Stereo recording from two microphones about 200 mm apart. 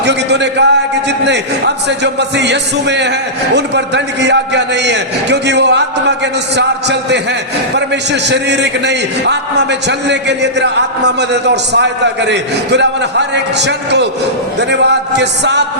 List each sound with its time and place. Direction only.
0.0 s a man's voice: 60° right (ahead or behind)